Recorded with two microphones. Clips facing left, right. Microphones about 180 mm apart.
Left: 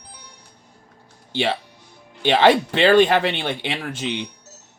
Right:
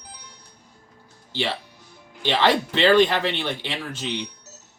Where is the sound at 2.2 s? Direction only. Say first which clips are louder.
Left 5 dB; 55° left (ahead or behind).